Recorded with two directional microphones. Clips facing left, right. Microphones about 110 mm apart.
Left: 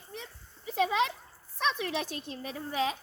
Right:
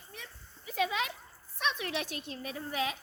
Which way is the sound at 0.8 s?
35° left (ahead or behind).